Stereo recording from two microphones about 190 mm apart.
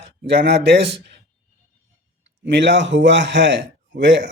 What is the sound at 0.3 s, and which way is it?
Speech, 60° right (ahead or behind).